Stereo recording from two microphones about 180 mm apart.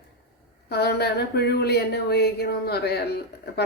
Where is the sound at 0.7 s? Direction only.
65° left (ahead or behind).